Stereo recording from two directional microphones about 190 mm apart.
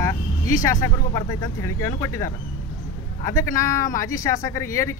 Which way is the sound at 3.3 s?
15° left (ahead or behind).